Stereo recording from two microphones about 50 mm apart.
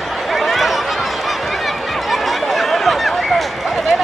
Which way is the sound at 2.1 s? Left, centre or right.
Centre.